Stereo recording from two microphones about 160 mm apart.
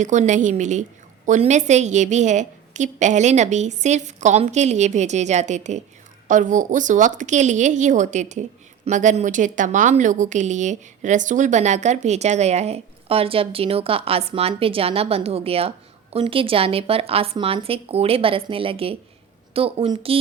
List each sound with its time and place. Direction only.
0.0 s a woman's voice: 50° right (ahead or behind)